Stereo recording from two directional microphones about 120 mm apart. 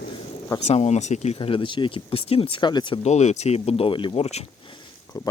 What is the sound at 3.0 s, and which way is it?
Speech, 70° left (ahead or behind).